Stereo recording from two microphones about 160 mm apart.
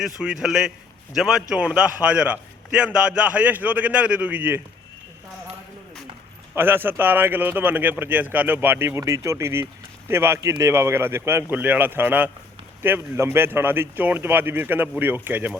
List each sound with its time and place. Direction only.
0.2 s a man's voice: 5° right (ahead or behind)
6.6 s a man's voice: 15° right (ahead or behind)